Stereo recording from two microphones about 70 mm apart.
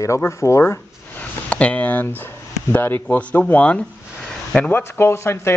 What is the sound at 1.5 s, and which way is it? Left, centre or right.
A man's voice, centre.